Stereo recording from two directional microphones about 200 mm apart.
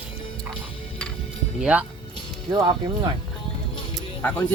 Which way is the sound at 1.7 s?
10° right (ahead or behind).